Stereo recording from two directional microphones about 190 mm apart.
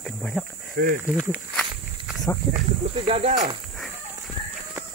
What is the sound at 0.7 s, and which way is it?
Speech, 45° right (ahead or behind).